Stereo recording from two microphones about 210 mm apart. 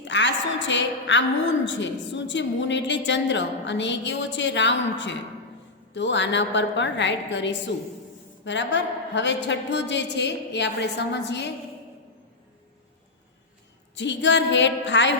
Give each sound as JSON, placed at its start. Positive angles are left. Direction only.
{"t": 0.0, "sound": "a woman's voice", "side_deg": 60}
{"t": 13.9, "sound": "a woman's voice", "side_deg": 60}